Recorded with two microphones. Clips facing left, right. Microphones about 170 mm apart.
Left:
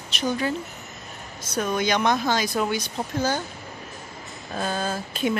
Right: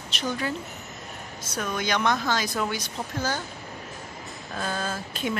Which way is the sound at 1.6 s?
20° left (ahead or behind).